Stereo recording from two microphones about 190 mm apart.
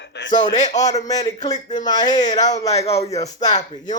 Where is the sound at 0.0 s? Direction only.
65° left (ahead or behind).